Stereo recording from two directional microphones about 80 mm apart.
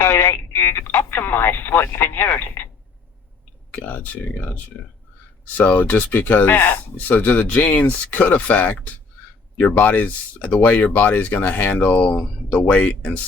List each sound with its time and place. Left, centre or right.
0.0 s speech: left
3.8 s speech: centre